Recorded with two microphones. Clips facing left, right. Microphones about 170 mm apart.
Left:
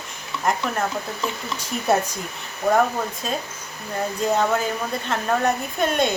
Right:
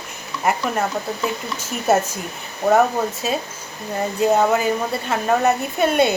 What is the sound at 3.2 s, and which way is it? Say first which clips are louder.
Speech: right 4 dB; 5° right (ahead or behind).